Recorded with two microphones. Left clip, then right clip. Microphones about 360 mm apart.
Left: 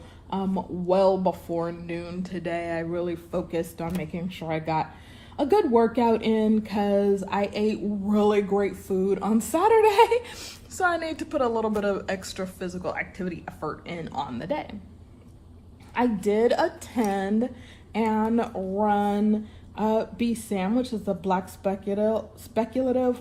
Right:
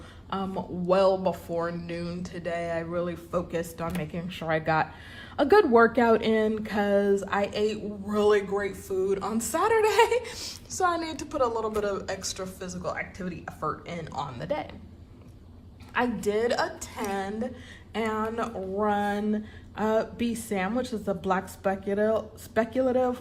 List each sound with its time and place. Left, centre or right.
0.3 s a woman's voice: right
16.2 s a woman's voice: right